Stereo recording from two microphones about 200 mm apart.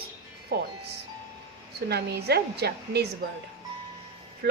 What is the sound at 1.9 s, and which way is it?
A woman's voice, 55° right (ahead or behind).